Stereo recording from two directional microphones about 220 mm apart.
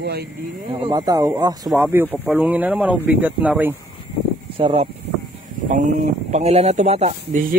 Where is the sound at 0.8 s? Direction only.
15° right (ahead or behind).